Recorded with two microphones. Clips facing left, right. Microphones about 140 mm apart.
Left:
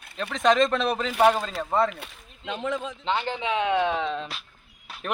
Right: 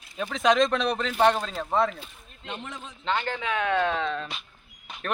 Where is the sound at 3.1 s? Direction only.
15° left (ahead or behind).